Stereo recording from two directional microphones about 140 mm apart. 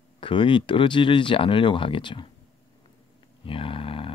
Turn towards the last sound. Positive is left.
turn(degrees=40)  # may be behind; listen again after turning